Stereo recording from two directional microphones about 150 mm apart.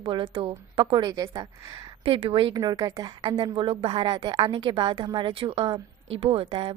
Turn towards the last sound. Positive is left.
turn(degrees=-35)  # may be behind; listen again after turning